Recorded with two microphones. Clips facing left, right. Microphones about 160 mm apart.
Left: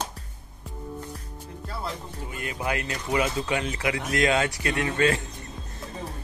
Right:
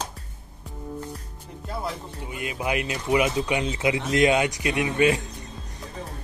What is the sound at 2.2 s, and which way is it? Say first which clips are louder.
Speech: right 2 dB; 20° right (ahead or behind).